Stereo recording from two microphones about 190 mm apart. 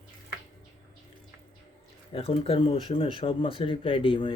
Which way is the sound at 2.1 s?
30° left (ahead or behind).